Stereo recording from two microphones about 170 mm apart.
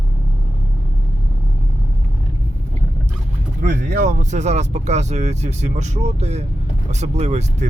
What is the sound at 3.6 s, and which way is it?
Speech, 55° right (ahead or behind).